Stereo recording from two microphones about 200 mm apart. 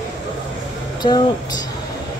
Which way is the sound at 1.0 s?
20° left (ahead or behind).